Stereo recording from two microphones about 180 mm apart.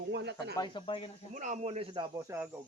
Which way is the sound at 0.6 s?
30° left (ahead or behind).